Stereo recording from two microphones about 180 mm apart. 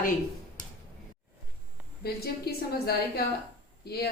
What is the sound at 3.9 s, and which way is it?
Speech, 60° left (ahead or behind).